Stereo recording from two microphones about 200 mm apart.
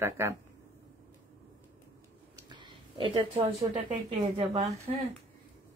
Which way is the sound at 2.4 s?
25° right (ahead or behind).